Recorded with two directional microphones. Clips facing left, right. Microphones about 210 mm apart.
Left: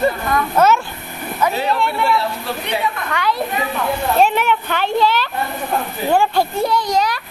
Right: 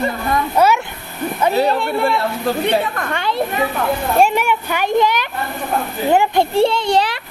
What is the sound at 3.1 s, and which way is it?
Speech, 25° right (ahead or behind).